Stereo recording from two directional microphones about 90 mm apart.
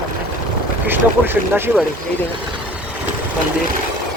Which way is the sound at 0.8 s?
25° right (ahead or behind).